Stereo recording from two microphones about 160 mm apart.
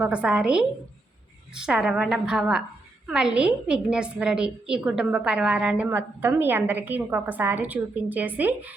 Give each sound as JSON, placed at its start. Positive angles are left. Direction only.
{"t": 0.0, "sound": "a woman's voice", "side_deg": -5}